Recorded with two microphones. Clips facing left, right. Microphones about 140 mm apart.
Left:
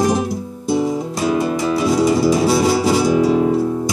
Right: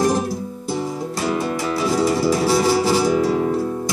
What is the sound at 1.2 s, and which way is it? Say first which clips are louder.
Music: left 4 dB; 15° left (ahead or behind).